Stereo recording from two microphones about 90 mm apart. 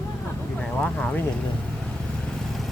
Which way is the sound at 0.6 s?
15° left (ahead or behind).